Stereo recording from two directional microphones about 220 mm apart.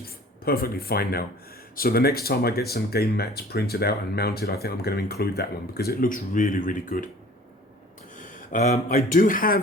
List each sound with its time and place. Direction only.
0.0 s speech: 40° left (ahead or behind)
8.2 s speech: 30° left (ahead or behind)